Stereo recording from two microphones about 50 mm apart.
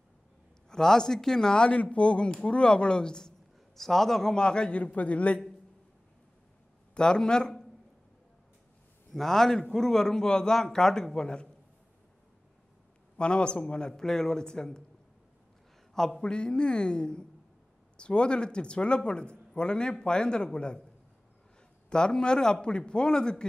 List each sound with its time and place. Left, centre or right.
0.7 s a man's voice: centre; by 5.4 s left
6.9 s a man's voice: centre
9.1 s a man's voice: centre
13.2 s a man's voice: centre
15.9 s a man's voice: centre
16.2 s a man's voice: centre
21.8 s a man's voice: centre